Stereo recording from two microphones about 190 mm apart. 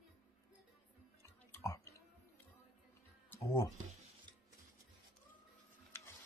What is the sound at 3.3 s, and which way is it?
Music, 15° left (ahead or behind).